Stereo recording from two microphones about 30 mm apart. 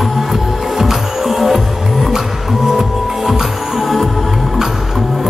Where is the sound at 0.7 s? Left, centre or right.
Centre.